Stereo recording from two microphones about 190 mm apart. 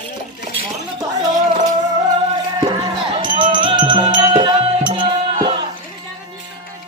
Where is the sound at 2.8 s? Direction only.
25° right (ahead or behind).